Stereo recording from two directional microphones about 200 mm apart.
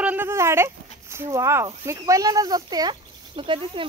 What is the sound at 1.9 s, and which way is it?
Speech, 15° right (ahead or behind).